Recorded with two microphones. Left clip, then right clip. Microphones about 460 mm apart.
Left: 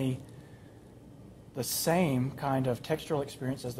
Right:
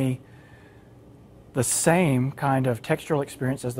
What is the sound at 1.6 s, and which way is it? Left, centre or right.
Speech, right.